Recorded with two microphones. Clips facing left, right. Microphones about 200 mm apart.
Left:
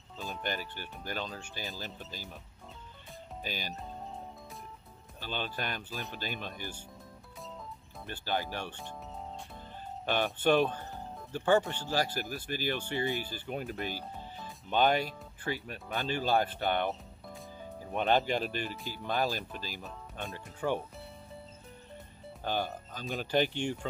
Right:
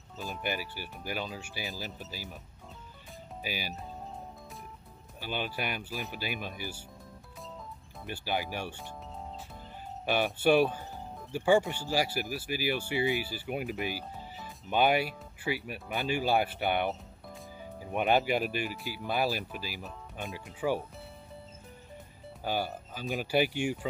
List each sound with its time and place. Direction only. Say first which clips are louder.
0.2 s speech: right 2 dB; 5° right (ahead or behind)
3.4 s speech: right 2 dB; 10° right (ahead or behind)
5.2 s speech: right 2 dB; 10° right (ahead or behind)
8.0 s speech: right 1 dB; 10° right (ahead or behind)
10.0 s speech: right 2 dB; 10° right (ahead or behind)
22.4 s speech: right 1 dB; 10° right (ahead or behind)